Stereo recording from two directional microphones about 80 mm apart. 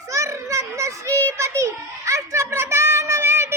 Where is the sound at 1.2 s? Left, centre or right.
Right.